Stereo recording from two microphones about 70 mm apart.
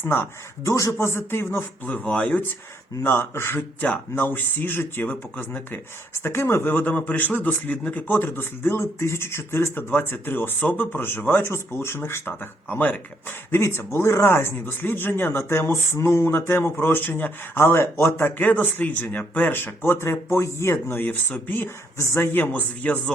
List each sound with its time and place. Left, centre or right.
0.0 s speech: left
0.6 s a man's voice: left
0.9 s speech: left
3.0 s speech: left
20.9 s speech: left
21.9 s speech: left